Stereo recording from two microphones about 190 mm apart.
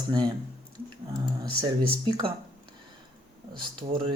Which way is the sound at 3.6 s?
25° right (ahead or behind).